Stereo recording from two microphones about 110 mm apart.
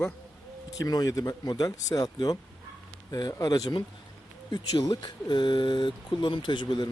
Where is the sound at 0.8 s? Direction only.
35° left (ahead or behind).